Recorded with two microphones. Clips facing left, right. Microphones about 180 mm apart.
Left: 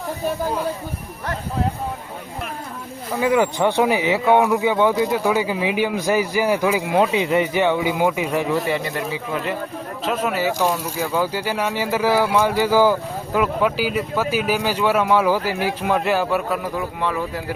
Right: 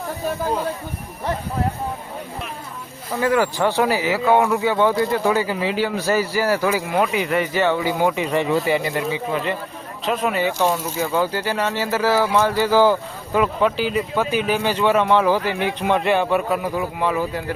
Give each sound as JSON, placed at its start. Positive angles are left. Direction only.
{"t": 3.2, "sound": "speech", "side_deg": 15}